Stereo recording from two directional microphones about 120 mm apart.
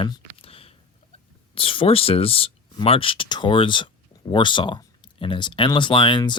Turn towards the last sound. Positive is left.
turn(degrees=40)  # may be behind; listen again after turning